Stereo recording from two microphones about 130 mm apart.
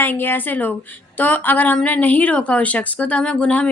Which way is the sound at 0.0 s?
15° left (ahead or behind).